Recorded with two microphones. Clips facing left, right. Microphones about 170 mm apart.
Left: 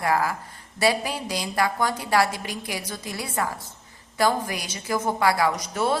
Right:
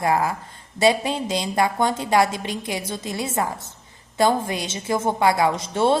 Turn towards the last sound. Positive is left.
turn(degrees=-25)  # may be behind; listen again after turning